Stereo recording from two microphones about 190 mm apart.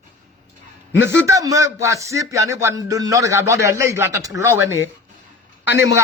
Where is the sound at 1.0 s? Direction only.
75° left (ahead or behind).